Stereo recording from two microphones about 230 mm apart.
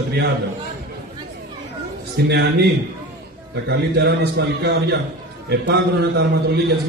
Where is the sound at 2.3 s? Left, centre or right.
Right.